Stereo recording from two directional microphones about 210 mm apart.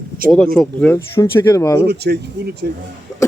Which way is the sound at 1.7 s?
50° right (ahead or behind).